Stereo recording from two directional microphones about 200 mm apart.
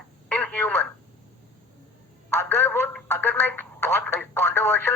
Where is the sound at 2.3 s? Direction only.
10° left (ahead or behind).